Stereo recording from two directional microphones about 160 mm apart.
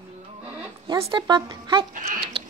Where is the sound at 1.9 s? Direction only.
55° right (ahead or behind).